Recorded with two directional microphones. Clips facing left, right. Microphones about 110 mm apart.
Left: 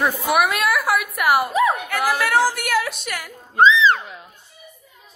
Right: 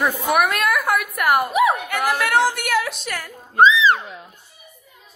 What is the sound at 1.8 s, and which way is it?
A woman's voice, centre (ahead or behind).